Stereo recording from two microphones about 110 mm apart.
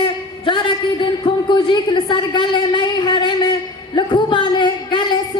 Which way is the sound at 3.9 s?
45° left (ahead or behind).